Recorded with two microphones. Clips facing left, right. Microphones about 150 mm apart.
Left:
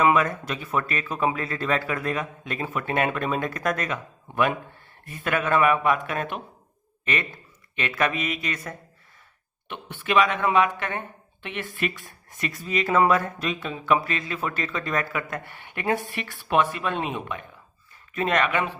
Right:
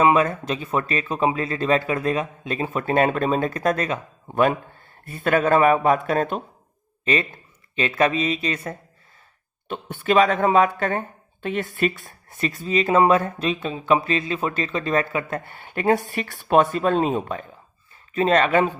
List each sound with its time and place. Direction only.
0.0 s speech: 25° right (ahead or behind)
9.6 s speech: 40° right (ahead or behind)